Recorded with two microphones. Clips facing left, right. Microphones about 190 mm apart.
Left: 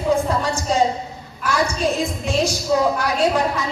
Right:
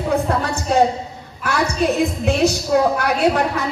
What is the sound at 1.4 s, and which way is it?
A woman's voice, 60° right (ahead or behind).